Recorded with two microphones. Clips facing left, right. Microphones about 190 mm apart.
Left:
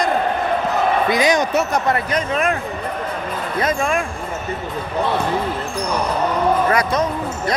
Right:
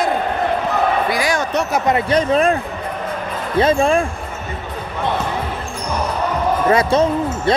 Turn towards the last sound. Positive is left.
turn(degrees=-30)  # may be behind; listen again after turning